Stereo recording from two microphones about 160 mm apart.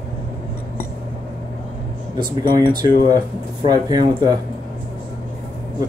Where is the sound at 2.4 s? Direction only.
30° right (ahead or behind).